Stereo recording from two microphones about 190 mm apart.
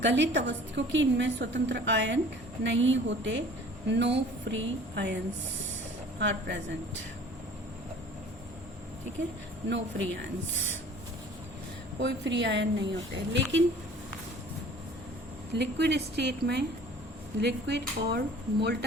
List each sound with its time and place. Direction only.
0.0 s a woman's voice: 70° right (ahead or behind)
6.1 s a woman's voice: 70° right (ahead or behind)
9.6 s a woman's voice: 70° right (ahead or behind)
11.9 s a woman's voice: 70° right (ahead or behind)
15.5 s speech: 60° right (ahead or behind)